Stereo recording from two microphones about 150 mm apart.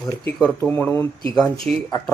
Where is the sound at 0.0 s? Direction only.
5° left (ahead or behind).